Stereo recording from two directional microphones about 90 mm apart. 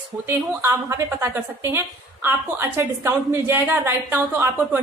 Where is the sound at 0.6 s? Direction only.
30° right (ahead or behind).